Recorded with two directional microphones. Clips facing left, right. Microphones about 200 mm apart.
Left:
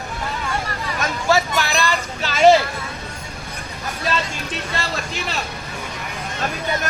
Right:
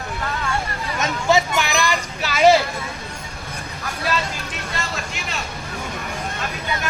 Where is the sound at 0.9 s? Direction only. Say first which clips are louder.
Right 1 dB; 20° right (ahead or behind).